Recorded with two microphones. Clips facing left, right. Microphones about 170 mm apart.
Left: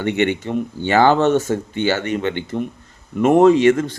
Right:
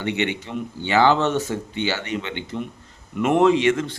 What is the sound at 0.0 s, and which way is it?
A man's voice, 50° left (ahead or behind).